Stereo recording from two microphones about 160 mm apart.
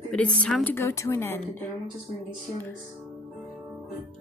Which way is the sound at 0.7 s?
15° left (ahead or behind).